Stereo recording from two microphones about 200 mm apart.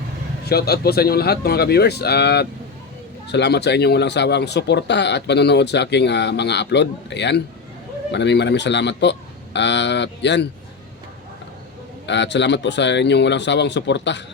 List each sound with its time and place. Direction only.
0.4 s a man's voice: 50° left (ahead or behind)
12.0 s speech: 60° left (ahead or behind)